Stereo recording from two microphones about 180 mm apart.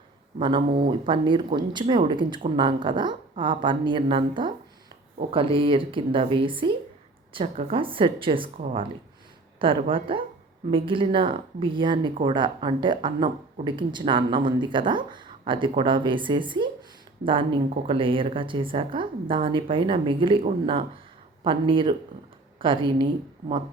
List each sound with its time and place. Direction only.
0.3 s speech: 25° right (ahead or behind)